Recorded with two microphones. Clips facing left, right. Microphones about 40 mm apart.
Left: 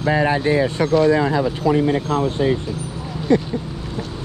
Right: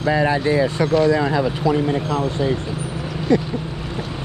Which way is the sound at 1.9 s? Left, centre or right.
Left.